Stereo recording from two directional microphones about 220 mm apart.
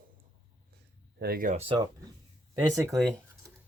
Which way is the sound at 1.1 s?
45° right (ahead or behind).